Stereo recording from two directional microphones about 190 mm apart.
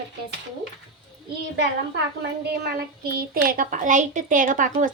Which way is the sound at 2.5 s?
55° right (ahead or behind).